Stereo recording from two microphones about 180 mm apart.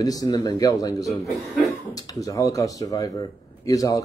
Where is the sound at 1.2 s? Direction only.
Centre (ahead or behind).